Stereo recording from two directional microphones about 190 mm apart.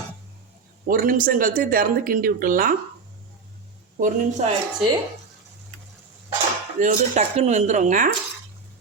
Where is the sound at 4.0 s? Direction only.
45° right (ahead or behind).